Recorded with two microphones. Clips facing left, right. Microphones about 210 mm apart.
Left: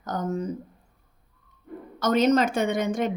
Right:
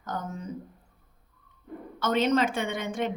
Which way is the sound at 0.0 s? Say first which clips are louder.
Left 7 dB; 40° left (ahead or behind).